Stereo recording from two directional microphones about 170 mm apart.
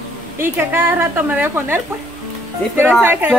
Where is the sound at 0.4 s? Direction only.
10° right (ahead or behind).